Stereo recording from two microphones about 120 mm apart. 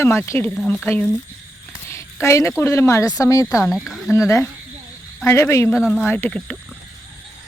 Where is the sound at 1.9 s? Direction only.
25° left (ahead or behind).